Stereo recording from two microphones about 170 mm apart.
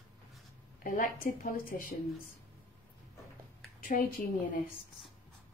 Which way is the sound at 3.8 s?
50° left (ahead or behind).